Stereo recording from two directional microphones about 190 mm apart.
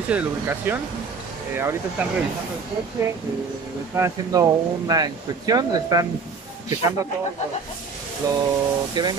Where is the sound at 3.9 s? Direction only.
15° right (ahead or behind).